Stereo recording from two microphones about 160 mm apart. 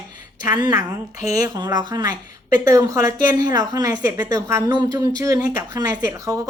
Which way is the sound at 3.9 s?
15° right (ahead or behind).